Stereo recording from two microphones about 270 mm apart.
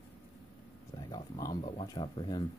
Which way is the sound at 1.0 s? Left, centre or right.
Centre.